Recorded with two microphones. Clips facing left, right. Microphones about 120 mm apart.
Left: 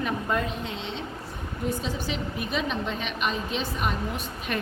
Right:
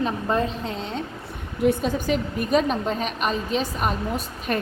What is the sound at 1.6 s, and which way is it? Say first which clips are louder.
A woman's voice: right 9 dB; 50° right (ahead or behind).